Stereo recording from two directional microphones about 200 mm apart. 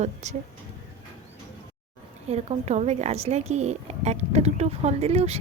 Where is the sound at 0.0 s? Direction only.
35° right (ahead or behind).